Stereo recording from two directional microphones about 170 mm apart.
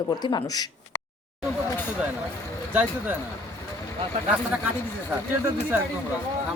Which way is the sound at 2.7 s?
10° right (ahead or behind).